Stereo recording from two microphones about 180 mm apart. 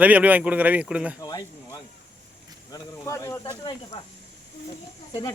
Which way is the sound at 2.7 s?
20° left (ahead or behind).